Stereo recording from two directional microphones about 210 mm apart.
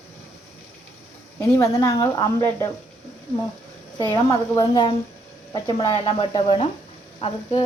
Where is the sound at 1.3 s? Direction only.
15° left (ahead or behind).